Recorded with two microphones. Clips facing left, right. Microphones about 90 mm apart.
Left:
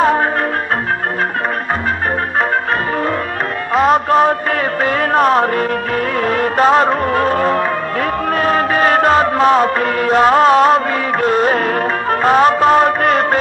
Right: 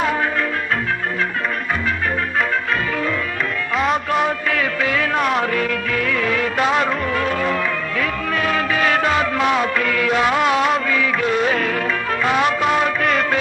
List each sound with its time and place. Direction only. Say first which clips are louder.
4.1 s a sound: left 7 dB; 40° left (ahead or behind)
4.8 s music of bollywood: left 8 dB; 40° left (ahead or behind)
8.4 s music: left 5 dB; 40° left (ahead or behind)